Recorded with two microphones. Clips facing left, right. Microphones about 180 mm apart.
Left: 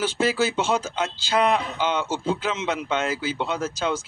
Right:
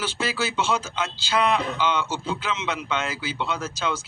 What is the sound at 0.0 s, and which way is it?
A man's voice, 50° left (ahead or behind).